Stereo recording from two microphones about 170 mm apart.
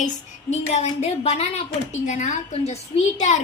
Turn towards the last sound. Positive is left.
turn(degrees=45)  # may be behind; listen again after turning